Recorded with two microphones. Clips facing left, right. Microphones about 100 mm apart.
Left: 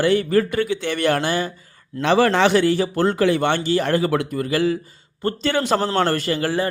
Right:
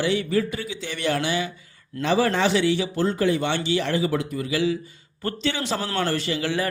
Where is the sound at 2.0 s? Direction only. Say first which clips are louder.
Left 5 dB; 75° left (ahead or behind).